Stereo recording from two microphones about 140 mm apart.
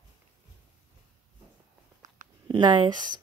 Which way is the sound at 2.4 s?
30° right (ahead or behind).